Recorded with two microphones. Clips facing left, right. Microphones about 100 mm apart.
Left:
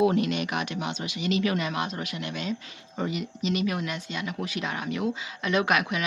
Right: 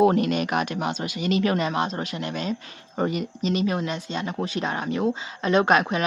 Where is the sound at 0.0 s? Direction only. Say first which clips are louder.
Right 4 dB; 45° right (ahead or behind).